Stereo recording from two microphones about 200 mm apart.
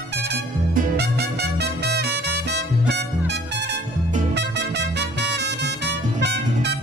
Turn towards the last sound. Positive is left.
turn(degrees=-55)  # may be behind; listen again after turning